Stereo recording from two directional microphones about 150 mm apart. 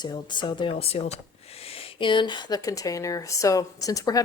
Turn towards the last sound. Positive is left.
turn(degrees=25)  # may be behind; listen again after turning